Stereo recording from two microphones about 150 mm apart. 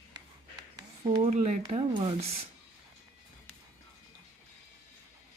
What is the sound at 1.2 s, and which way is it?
Speech, 55° right (ahead or behind).